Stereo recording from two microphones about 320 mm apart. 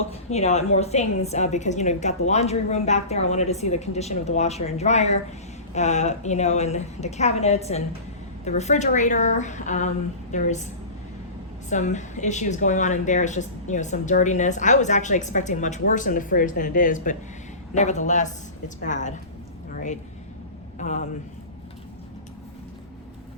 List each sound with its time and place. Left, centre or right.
0.1 s a woman's voice: centre
11.7 s a woman's voice: left
19.7 s a sound: left
20.7 s speech: left